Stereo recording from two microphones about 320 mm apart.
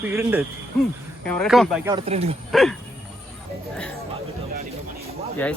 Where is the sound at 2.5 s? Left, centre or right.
Centre.